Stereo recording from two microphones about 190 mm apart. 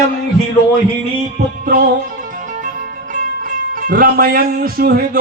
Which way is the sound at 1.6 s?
50° right (ahead or behind).